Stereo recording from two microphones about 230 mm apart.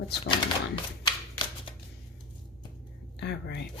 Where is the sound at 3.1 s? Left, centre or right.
Left.